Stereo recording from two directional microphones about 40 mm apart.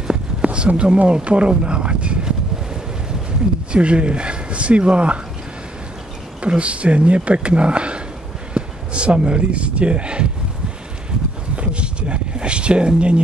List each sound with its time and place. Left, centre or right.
0.1 s speech: right
3.7 s speech: right
6.4 s speech: right
11.5 s a sound: right